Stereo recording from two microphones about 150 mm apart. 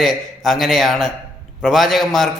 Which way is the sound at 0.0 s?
Centre (ahead or behind).